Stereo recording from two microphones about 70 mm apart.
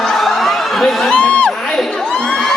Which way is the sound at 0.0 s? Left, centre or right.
Centre.